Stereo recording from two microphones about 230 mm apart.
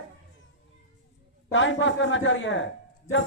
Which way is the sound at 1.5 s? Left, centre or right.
Left.